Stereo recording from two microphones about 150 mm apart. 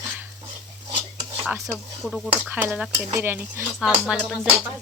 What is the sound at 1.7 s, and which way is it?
Speech, centre (ahead or behind).